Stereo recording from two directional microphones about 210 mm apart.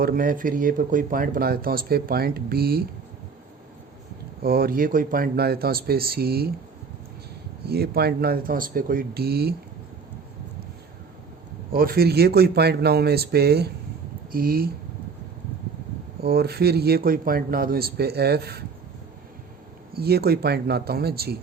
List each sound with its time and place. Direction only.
0.0 s speech: 40° right (ahead or behind)
4.4 s speech: 45° right (ahead or behind)
7.6 s speech: 50° right (ahead or behind)
11.7 s speech: 45° right (ahead or behind)
16.2 s speech: 50° right (ahead or behind)
19.9 s speech: 50° right (ahead or behind)